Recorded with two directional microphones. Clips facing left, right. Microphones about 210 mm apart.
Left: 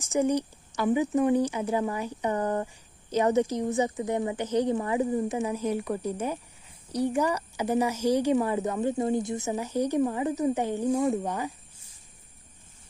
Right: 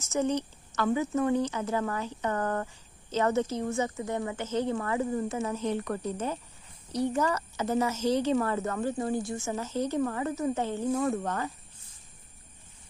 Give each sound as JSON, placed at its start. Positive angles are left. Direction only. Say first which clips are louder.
{"t": 0.0, "sound": "speech", "louder": "left 3 dB", "side_deg": 15}